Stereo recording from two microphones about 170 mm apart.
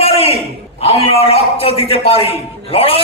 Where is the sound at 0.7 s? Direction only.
35° left (ahead or behind).